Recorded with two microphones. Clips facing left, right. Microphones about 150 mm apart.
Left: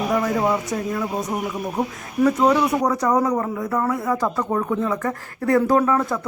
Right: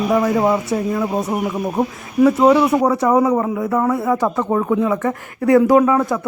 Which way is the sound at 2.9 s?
25° right (ahead or behind).